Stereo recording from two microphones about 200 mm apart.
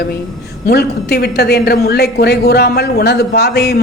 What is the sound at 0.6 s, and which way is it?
A woman's voice, 55° left (ahead or behind).